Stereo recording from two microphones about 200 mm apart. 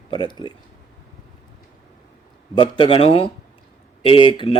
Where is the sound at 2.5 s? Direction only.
25° left (ahead or behind).